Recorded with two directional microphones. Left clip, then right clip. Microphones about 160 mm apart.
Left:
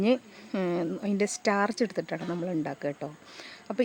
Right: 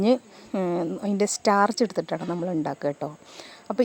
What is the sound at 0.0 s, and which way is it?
A woman's voice, 20° right (ahead or behind).